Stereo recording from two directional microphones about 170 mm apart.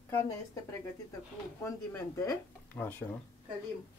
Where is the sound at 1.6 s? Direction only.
15° left (ahead or behind).